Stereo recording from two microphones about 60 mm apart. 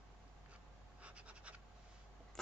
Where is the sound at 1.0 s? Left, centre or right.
Centre.